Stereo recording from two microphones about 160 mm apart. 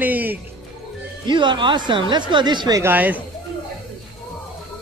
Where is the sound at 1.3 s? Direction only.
30° right (ahead or behind).